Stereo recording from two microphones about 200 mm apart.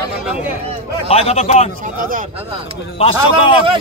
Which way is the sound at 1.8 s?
40° right (ahead or behind).